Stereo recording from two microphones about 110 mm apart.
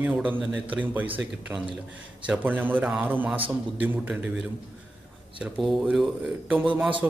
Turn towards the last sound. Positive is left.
turn(degrees=-10)  # may be behind; listen again after turning